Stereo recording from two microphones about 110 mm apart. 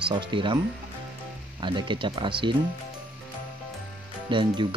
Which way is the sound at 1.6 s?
45° right (ahead or behind).